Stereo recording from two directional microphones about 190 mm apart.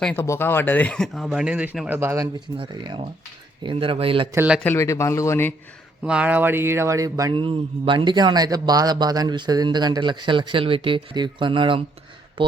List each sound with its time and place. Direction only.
0.0 s speech: 10° left (ahead or behind); by 4.3 s 30° right (ahead or behind)
4.3 s speech: 10° right (ahead or behind)
4.6 s speech: 15° left (ahead or behind)
6.0 s speech: 5° right (ahead or behind); by 12.5 s 25° right (ahead or behind)